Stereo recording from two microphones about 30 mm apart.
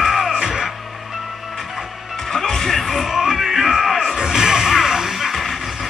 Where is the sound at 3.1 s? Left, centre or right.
Centre.